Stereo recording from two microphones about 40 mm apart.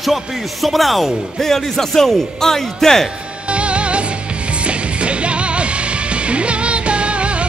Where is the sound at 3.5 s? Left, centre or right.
Right.